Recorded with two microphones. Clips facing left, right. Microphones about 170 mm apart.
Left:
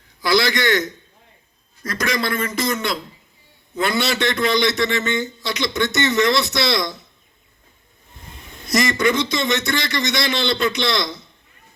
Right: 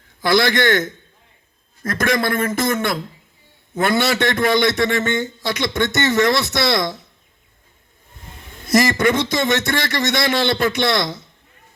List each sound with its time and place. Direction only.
0.2 s a man's voice: 50° right (ahead or behind)
8.6 s a man's voice: 50° right (ahead or behind)